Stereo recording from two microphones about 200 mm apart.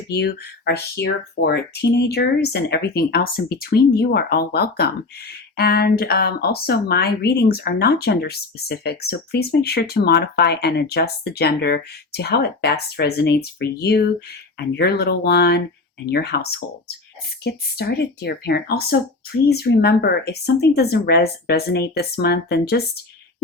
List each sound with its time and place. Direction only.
0.1 s speech: 55° left (ahead or behind)